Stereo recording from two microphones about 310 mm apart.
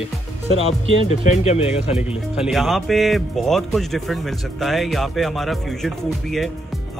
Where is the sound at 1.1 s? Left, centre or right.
Left.